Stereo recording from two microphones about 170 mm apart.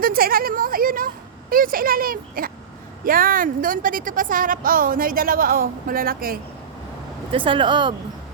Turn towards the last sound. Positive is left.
turn(degrees=-25)  # may be behind; listen again after turning